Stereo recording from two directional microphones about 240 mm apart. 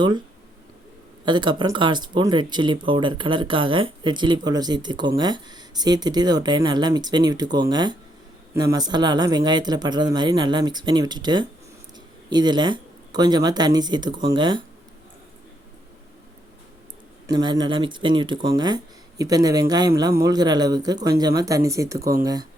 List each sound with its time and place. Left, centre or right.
1.2 s speech: centre
17.2 s speech: centre